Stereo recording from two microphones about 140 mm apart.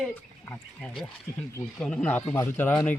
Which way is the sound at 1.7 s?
5° left (ahead or behind).